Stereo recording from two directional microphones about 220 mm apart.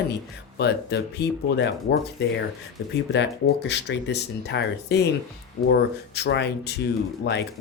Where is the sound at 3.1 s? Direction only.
50° left (ahead or behind).